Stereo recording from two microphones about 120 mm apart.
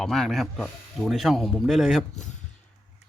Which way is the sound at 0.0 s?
5° left (ahead or behind).